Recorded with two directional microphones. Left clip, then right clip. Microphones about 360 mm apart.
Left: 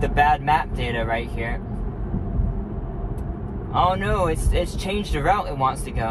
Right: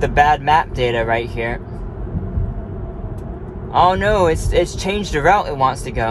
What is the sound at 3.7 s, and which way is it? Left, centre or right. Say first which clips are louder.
Speech: right 7 dB; right.